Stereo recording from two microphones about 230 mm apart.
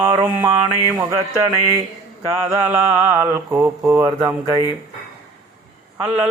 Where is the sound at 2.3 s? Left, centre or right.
Centre.